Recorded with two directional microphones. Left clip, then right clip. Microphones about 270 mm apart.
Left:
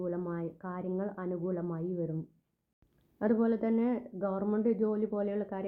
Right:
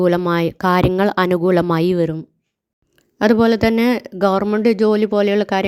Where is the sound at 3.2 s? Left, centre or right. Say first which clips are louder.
Right 16 dB; right.